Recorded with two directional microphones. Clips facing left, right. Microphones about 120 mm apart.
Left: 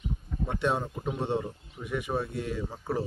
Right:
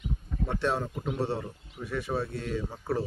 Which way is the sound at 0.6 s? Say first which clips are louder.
Left 1 dB; 15° left (ahead or behind).